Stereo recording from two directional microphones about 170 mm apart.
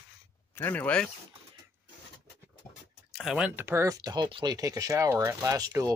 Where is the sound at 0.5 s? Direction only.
10° left (ahead or behind).